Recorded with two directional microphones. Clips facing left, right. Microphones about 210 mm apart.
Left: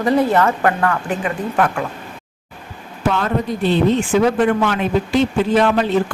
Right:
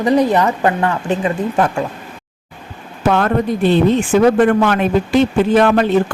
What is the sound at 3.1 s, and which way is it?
A woman's voice, 55° right (ahead or behind).